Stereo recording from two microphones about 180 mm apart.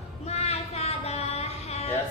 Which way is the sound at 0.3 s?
35° left (ahead or behind).